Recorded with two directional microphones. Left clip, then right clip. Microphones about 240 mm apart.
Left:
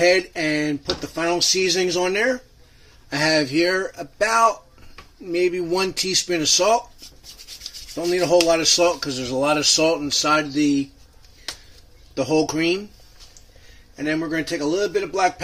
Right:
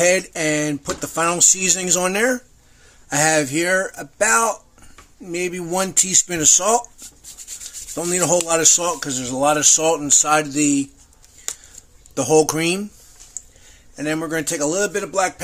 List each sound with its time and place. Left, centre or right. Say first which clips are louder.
0.0 s speech: even; right
8.0 s speech: left 2 dB; right
12.1 s speech: right 5 dB; right
13.9 s speech: right 1 dB; right